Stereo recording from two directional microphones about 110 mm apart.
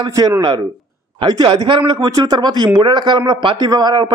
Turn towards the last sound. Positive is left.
turn(degrees=-40)  # may be behind; listen again after turning